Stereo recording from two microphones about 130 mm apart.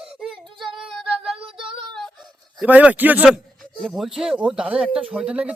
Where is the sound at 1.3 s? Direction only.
45° right (ahead or behind).